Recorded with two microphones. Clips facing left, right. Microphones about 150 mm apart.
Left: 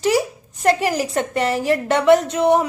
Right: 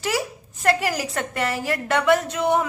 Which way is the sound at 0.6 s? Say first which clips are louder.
Left 4 dB; 20° left (ahead or behind).